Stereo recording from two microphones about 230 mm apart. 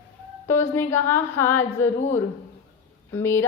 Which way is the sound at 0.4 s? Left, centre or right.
Centre.